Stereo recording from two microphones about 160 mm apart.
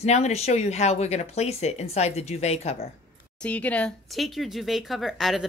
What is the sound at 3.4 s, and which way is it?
Speech, 10° left (ahead or behind).